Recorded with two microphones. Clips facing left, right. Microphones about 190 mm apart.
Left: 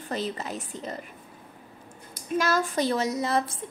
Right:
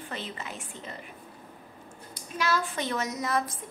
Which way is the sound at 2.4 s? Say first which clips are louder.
Left 3 dB; 40° left (ahead or behind).